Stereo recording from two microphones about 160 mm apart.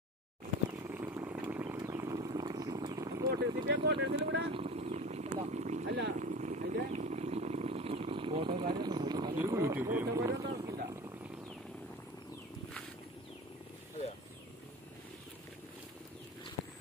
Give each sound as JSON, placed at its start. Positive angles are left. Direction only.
{"t": 0.8, "sound": "a sound", "side_deg": -15}
{"t": 3.6, "sound": "speech", "side_deg": -90}
{"t": 4.5, "sound": "a sound", "side_deg": -40}
{"t": 5.9, "sound": "speech", "side_deg": -90}
{"t": 6.1, "sound": "vehicle", "side_deg": -50}
{"t": 9.4, "sound": "speech", "side_deg": -20}